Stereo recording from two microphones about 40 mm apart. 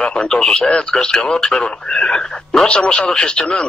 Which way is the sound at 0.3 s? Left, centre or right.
Left.